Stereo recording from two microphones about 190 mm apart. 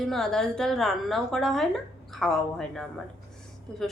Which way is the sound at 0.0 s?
Centre (ahead or behind).